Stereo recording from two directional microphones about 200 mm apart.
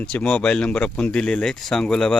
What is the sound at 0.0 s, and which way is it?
Speech, 5° left (ahead or behind).